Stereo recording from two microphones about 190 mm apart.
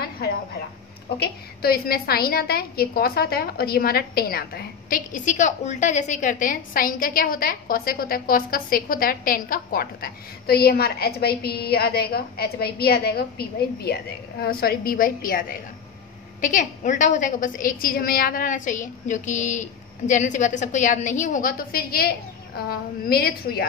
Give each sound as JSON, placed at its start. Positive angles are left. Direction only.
{"t": 1.2, "sound": "a woman's voice", "side_deg": 55}